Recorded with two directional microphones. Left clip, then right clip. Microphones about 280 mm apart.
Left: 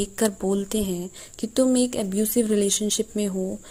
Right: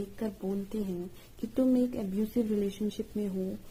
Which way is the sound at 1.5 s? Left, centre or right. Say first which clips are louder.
Left 7 dB; centre.